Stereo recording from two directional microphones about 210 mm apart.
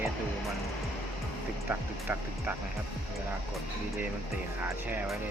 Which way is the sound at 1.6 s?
10° right (ahead or behind).